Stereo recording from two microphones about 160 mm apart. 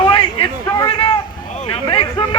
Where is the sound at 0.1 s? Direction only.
35° left (ahead or behind).